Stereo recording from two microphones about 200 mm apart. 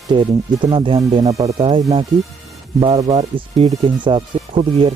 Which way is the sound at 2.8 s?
30° right (ahead or behind).